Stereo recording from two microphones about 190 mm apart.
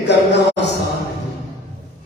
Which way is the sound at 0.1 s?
65° left (ahead or behind).